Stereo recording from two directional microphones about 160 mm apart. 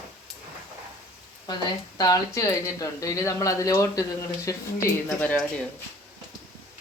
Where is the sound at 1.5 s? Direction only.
25° left (ahead or behind).